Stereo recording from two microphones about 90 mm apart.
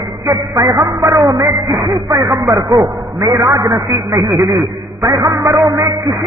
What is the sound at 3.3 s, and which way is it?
Music, 35° right (ahead or behind).